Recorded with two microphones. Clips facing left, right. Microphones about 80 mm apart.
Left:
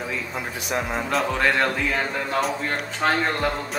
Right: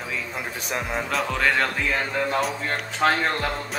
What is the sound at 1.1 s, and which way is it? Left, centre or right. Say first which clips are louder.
Speech: left 2 dB; centre.